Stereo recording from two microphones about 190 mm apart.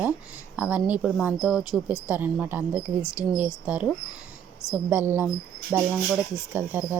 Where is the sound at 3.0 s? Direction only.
15° left (ahead or behind).